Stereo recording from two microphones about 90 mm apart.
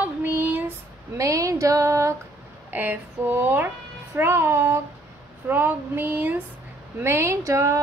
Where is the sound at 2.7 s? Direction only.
20° right (ahead or behind).